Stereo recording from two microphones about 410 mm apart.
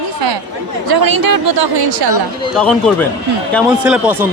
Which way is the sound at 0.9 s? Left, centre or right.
Right.